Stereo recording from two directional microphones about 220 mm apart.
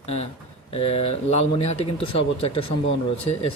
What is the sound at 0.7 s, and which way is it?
Speech, 25° left (ahead or behind).